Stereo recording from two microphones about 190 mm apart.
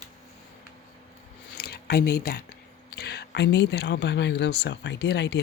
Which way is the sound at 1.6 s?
60° left (ahead or behind).